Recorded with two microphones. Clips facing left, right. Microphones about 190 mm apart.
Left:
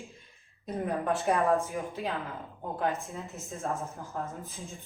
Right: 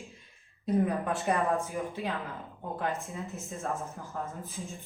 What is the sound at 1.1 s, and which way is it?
A woman's voice, centre (ahead or behind).